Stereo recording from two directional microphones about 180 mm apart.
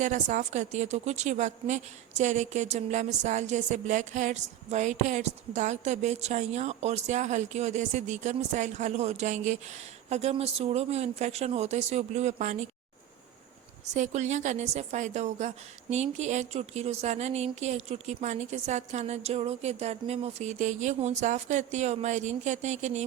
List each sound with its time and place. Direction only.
0.0 s a woman's voice: 45° right (ahead or behind)
13.9 s a woman's voice: 40° right (ahead or behind)